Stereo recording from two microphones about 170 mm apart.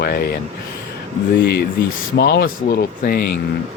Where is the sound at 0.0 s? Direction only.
70° left (ahead or behind).